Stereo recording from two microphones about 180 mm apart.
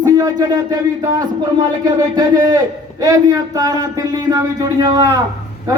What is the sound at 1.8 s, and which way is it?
Speech, 20° right (ahead or behind).